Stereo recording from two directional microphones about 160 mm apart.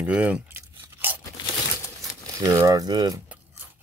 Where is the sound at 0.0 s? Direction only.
10° right (ahead or behind).